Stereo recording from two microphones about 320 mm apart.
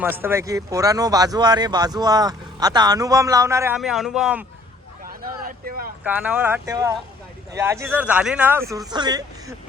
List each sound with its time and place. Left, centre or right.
0.0 s speech: centre
5.2 s vehicle: right
6.0 s speech: centre